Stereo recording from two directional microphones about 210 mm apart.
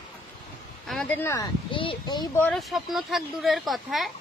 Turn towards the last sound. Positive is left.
turn(degrees=0)  # may be behind; listen again after turning